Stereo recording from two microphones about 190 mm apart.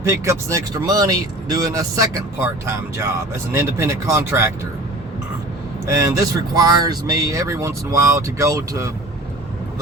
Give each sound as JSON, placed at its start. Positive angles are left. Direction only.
{"t": 0.0, "sound": "speech", "side_deg": -15}
{"t": 5.8, "sound": "speech", "side_deg": -15}